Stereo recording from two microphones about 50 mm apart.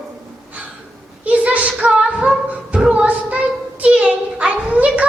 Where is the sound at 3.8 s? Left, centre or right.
Right.